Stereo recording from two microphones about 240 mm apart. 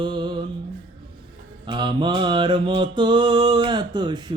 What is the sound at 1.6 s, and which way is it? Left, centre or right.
Music, centre.